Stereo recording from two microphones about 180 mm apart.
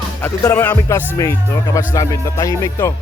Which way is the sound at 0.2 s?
10° left (ahead or behind).